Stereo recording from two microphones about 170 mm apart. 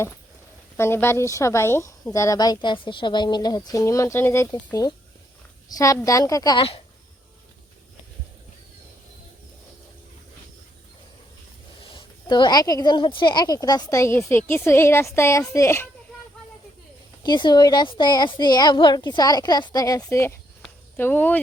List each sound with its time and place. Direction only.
0.8 s speech: 15° left (ahead or behind)
11.9 s speech: 25° left (ahead or behind)
17.2 s speech: 25° left (ahead or behind); by 21.4 s 10° left (ahead or behind)